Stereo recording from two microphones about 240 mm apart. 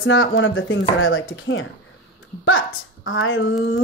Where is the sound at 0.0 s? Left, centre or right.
Left.